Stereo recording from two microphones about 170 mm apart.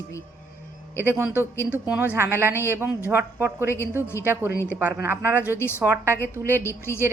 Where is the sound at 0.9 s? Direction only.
10° right (ahead or behind).